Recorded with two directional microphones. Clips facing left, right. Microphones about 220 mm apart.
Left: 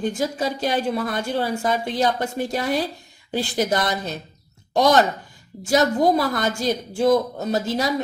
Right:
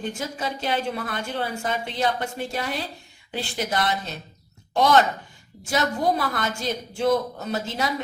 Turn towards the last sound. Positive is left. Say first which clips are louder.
# left 5 dB
turn(degrees=40)  # may be behind; listen again after turning